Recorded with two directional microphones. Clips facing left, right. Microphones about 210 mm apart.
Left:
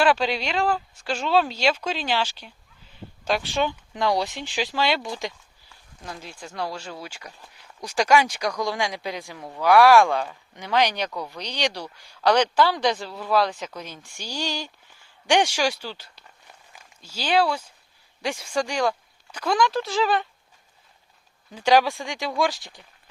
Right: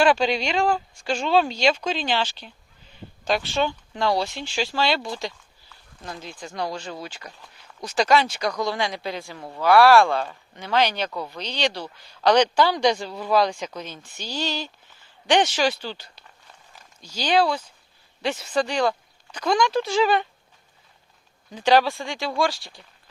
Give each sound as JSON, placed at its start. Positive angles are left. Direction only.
{"t": 0.0, "sound": "speech", "side_deg": 5}
{"t": 11.1, "sound": "speech", "side_deg": -5}
{"t": 11.3, "sound": "speech", "side_deg": 15}
{"t": 21.5, "sound": "speech", "side_deg": 10}